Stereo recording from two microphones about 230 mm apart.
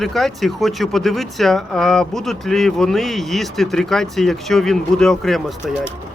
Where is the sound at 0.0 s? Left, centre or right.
Centre.